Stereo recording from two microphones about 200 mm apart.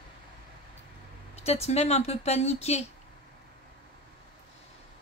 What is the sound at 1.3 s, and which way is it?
Speech, 30° left (ahead or behind).